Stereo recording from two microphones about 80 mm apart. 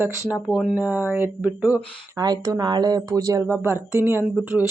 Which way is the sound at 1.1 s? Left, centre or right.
Right.